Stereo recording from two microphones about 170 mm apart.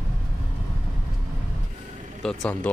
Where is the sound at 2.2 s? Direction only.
5° left (ahead or behind).